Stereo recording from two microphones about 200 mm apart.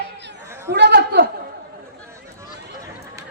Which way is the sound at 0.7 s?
55° right (ahead or behind).